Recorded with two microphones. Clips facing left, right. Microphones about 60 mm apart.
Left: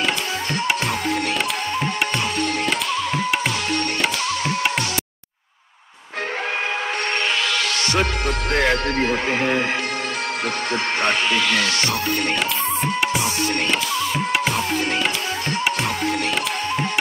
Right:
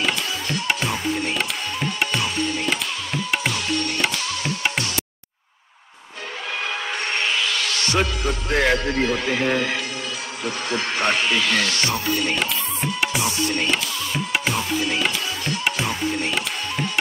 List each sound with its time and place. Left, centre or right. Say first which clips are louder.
0.8 s music: left 2 dB; left
2.3 s music: left 2 dB; left
8.5 s music: even; centre
8.7 s music: left 1 dB; left
9.0 s speech: left 1 dB; left
11.5 s music: left 1 dB; centre
11.9 s music: left 1 dB; left
13.7 s music: left 3 dB; centre
14.7 s music: left 1 dB; left
15.8 s music: left 2 dB; left